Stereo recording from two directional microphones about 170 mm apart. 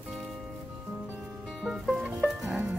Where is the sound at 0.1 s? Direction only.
Centre (ahead or behind).